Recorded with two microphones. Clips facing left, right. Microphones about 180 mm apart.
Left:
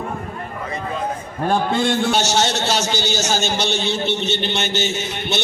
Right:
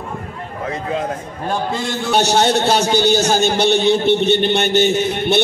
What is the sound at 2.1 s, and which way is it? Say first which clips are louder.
A man's voice: right 5 dB; 55° right (ahead or behind).